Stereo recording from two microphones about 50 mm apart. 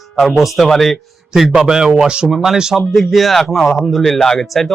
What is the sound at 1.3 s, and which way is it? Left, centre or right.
Speech, centre.